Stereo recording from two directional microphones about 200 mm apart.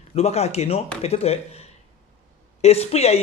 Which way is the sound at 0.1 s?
30° left (ahead or behind).